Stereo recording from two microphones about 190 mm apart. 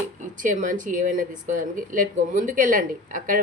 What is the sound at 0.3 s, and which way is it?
Speech, 45° right (ahead or behind).